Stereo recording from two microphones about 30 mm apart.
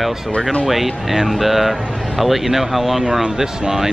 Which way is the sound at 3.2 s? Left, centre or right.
Centre.